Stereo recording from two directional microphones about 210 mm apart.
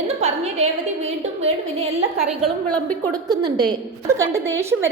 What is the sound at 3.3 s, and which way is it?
A woman's voice, 20° right (ahead or behind).